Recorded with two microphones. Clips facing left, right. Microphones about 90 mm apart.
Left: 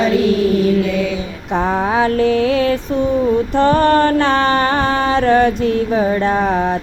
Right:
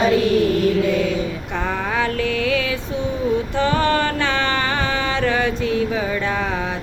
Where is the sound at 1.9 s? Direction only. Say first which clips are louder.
Left 8 dB; 45° left (ahead or behind).